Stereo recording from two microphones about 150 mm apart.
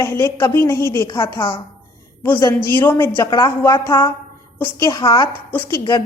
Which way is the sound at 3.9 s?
25° left (ahead or behind).